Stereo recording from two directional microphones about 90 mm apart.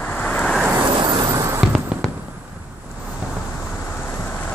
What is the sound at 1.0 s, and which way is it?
Vehicle, 50° right (ahead or behind).